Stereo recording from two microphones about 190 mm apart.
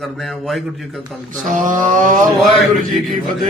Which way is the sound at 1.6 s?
45° right (ahead or behind).